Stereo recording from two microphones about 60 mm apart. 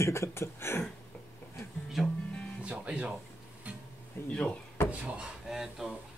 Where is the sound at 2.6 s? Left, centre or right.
Right.